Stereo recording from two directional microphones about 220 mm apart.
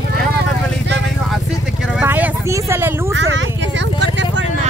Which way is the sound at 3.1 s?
55° right (ahead or behind).